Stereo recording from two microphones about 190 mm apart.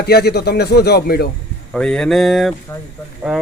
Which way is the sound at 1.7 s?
5° left (ahead or behind).